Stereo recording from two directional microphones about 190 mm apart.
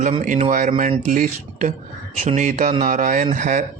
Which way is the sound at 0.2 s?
40° right (ahead or behind).